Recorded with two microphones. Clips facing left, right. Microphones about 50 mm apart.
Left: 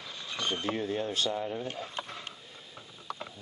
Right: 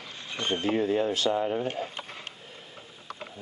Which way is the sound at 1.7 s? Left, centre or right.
Right.